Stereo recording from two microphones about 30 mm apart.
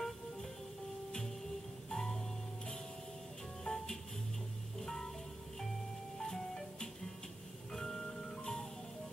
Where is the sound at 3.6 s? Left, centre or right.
Centre.